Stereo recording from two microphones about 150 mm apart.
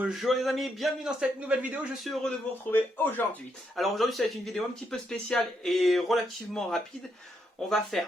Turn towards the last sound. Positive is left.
turn(degrees=0)  # may be behind; listen again after turning